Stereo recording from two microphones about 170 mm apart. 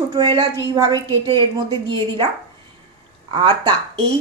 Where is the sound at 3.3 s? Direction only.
30° right (ahead or behind).